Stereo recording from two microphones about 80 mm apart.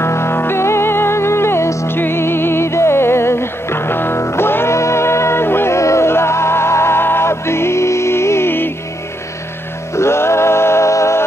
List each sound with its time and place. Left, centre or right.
0.0 s music: left
9.9 s music: left